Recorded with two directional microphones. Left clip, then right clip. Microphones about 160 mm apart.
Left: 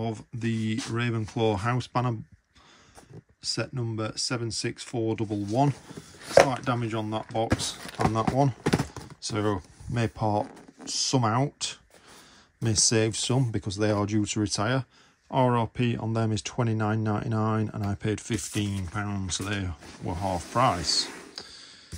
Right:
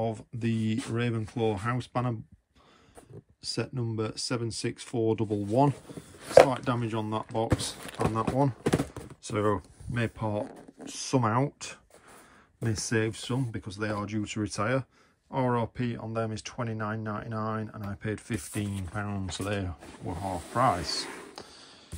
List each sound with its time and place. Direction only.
0.0 s speech: centre (ahead or behind)
3.4 s speech: centre (ahead or behind); by 10.4 s 15° left (ahead or behind)
10.4 s speech: centre (ahead or behind); by 17.6 s 35° left (ahead or behind)
18.0 s speech: 10° left (ahead or behind)
20.8 s speech: centre (ahead or behind)